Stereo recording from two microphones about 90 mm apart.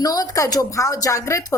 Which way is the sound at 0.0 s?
45° left (ahead or behind).